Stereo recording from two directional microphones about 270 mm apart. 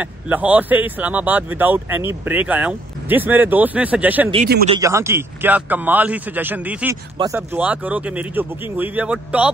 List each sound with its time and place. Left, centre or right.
0.0 s speech: centre